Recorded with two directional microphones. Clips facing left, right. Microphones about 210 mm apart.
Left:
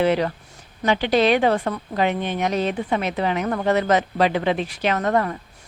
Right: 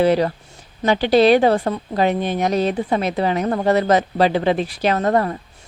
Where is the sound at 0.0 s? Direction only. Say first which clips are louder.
Right 3 dB; 35° right (ahead or behind).